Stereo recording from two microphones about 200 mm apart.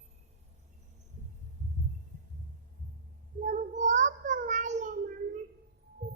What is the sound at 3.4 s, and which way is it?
Child singing, 35° right (ahead or behind).